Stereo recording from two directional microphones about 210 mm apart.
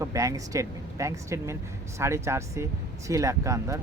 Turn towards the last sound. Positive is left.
turn(degrees=-15)  # may be behind; listen again after turning